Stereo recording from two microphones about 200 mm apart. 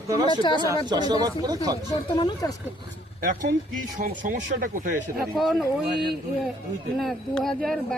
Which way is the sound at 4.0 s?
40° right (ahead or behind).